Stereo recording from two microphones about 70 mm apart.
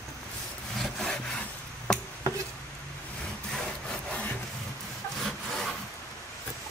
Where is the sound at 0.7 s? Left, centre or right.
Centre.